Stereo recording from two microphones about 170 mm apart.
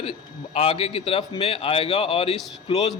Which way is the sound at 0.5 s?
35° left (ahead or behind).